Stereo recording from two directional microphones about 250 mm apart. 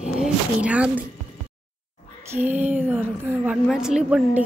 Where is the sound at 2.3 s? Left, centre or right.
Centre.